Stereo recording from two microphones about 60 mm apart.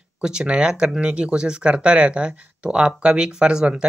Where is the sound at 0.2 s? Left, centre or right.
Centre.